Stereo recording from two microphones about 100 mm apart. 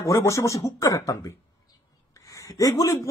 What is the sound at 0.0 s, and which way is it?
A man's voice, 30° left (ahead or behind).